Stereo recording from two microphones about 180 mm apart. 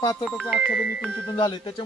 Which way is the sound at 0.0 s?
20° left (ahead or behind).